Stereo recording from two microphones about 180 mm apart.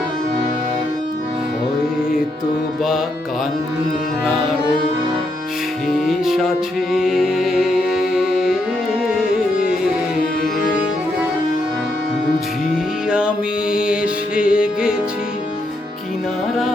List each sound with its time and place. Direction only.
6.1 s music: centre (ahead or behind)
12.7 s music: 5° right (ahead or behind)